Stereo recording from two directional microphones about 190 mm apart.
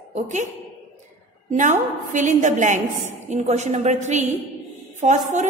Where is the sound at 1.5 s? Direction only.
40° right (ahead or behind).